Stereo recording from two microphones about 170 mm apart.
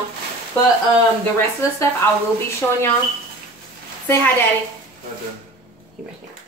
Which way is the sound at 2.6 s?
10° left (ahead or behind).